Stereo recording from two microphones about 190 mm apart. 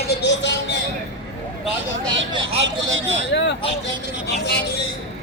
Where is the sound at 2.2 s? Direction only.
75° right (ahead or behind).